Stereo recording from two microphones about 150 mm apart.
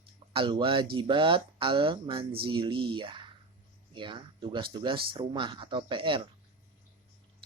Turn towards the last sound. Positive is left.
turn(degrees=-35)  # may be behind; listen again after turning